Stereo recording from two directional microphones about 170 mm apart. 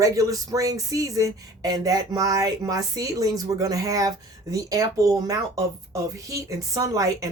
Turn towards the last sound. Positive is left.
turn(degrees=-20)  # may be behind; listen again after turning